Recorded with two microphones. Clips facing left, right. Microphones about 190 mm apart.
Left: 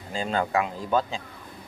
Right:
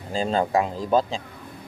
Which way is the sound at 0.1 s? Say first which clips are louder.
Right 4 dB; 35° right (ahead or behind).